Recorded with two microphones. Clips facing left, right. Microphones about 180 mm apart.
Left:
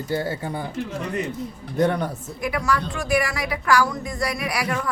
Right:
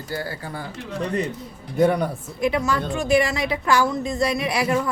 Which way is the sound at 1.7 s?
5° right (ahead or behind).